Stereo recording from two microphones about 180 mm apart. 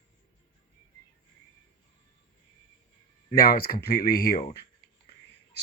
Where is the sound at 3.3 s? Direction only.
55° left (ahead or behind).